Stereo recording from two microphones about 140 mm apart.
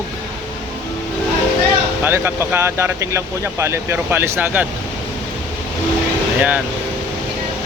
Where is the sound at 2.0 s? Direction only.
15° right (ahead or behind).